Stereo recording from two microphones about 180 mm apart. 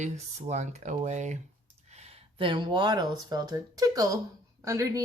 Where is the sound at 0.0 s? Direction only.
40° right (ahead or behind).